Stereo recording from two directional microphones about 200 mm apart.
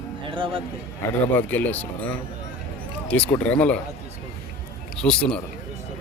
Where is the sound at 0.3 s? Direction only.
25° right (ahead or behind).